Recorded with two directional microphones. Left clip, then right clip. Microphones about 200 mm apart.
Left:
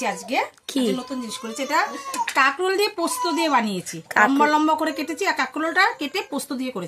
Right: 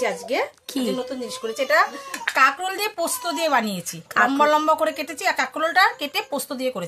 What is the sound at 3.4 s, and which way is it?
Speech, 50° right (ahead or behind).